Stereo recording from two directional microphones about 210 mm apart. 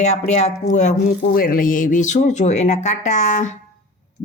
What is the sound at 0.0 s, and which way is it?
Speech, 35° left (ahead or behind).